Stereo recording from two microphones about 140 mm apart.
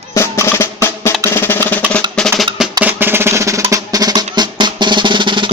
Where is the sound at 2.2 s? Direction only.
Centre (ahead or behind).